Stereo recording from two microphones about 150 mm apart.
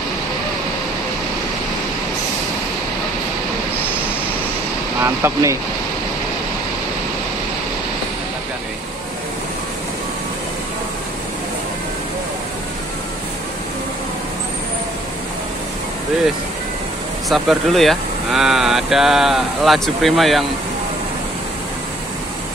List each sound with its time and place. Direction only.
5.0 s speech: 20° right (ahead or behind)
17.3 s speech: centre (ahead or behind)